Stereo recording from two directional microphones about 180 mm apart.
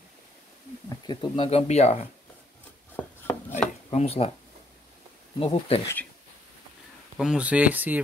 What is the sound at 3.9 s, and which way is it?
Speech, 35° left (ahead or behind).